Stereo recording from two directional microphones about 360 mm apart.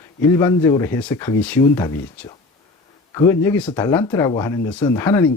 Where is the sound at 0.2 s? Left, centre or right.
Centre.